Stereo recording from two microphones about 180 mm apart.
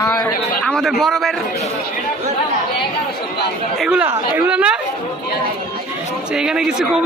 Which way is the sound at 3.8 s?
10° right (ahead or behind).